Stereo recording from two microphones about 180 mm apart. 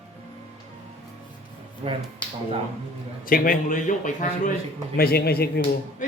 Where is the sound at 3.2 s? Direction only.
50° left (ahead or behind).